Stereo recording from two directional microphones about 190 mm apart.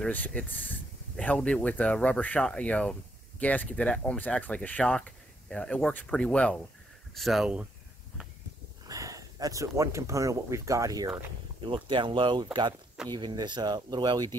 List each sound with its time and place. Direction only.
0.0 s speech: 10° left (ahead or behind)
8.8 s speech: 15° right (ahead or behind)